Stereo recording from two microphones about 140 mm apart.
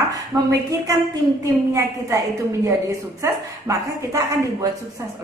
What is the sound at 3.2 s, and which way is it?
A woman's voice, 20° right (ahead or behind).